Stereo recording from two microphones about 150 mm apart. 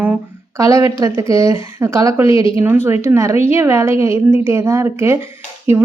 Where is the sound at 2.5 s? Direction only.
15° right (ahead or behind).